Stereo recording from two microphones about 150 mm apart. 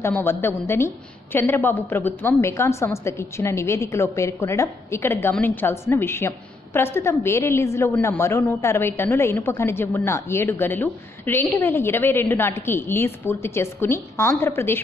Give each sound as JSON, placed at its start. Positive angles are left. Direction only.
{"t": 0.0, "sound": "a woman's voice", "side_deg": 15}